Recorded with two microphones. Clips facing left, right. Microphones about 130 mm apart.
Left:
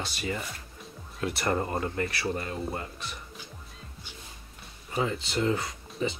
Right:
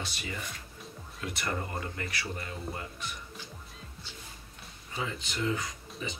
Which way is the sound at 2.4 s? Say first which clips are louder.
Left 5 dB; 55° left (ahead or behind).